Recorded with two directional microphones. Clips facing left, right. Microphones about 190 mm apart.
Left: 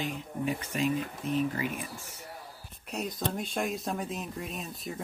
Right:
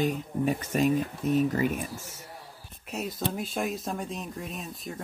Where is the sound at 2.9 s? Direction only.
5° right (ahead or behind).